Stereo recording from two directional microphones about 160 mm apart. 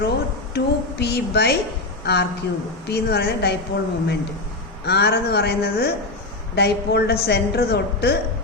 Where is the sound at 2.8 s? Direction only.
90° left.